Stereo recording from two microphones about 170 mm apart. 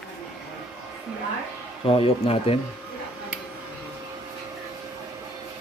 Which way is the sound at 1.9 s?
35° left (ahead or behind).